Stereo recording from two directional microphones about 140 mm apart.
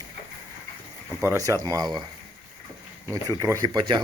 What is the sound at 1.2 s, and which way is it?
Speech, 25° right (ahead or behind).